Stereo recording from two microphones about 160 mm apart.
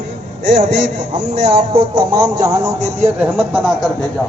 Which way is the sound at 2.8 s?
45° right (ahead or behind).